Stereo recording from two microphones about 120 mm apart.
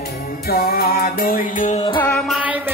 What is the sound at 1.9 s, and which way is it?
Music, 15° left (ahead or behind).